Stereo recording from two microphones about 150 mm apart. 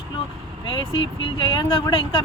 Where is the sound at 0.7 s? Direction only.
35° left (ahead or behind).